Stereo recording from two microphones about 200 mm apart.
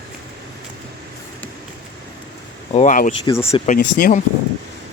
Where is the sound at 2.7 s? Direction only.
40° left (ahead or behind).